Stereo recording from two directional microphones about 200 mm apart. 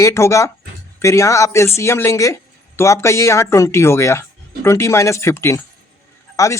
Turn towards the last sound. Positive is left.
turn(degrees=15)  # may be behind; listen again after turning